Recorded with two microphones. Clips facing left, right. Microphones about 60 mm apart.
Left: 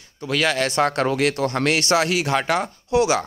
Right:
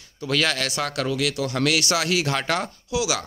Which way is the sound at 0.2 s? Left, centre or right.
Centre.